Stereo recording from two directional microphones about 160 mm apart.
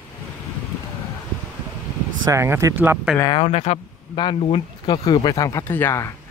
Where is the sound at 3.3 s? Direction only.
35° left (ahead or behind); by 6.1 s 15° left (ahead or behind).